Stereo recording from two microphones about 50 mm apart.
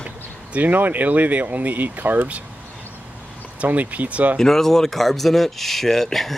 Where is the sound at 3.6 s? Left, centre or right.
Right.